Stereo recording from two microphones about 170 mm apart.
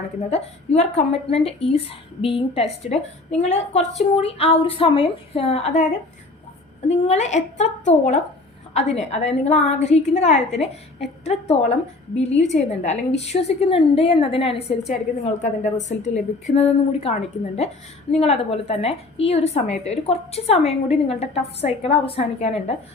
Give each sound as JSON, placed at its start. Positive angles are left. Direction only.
{"t": 0.3, "sound": "a woman's voice", "side_deg": 40}